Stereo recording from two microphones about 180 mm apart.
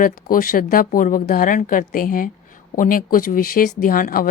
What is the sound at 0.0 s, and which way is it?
Speech, 50° left (ahead or behind).